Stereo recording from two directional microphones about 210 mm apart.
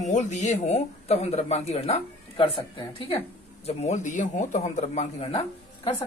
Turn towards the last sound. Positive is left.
turn(degrees=25)  # may be behind; listen again after turning